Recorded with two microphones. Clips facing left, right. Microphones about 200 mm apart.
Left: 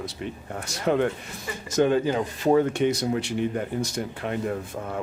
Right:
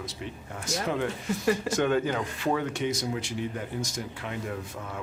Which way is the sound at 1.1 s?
70° right (ahead or behind).